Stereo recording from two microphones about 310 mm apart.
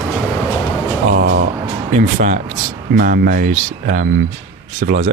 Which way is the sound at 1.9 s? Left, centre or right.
Right.